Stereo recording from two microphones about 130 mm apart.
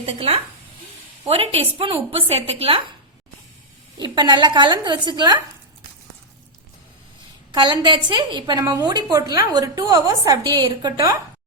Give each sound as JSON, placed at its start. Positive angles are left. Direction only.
{"t": 0.0, "sound": "a woman's voice", "side_deg": -50}
{"t": 4.0, "sound": "a woman's voice", "side_deg": -35}
{"t": 7.5, "sound": "a woman's voice", "side_deg": -35}